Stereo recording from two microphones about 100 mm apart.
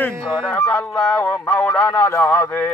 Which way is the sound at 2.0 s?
30° left (ahead or behind).